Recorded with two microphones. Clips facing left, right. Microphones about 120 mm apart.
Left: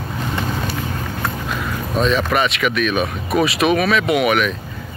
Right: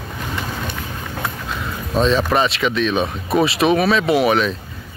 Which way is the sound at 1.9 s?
30° right (ahead or behind).